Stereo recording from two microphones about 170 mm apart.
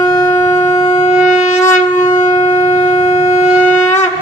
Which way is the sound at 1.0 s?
45° left (ahead or behind).